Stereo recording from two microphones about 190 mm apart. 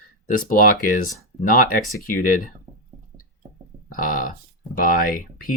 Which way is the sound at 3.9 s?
45° left (ahead or behind).